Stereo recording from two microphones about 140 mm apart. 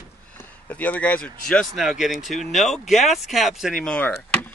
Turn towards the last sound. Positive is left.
turn(degrees=15)  # may be behind; listen again after turning